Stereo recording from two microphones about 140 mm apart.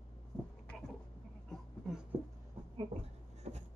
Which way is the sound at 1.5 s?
5° right (ahead or behind).